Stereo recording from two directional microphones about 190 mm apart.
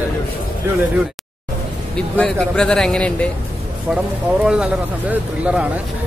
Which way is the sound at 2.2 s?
5° left (ahead or behind).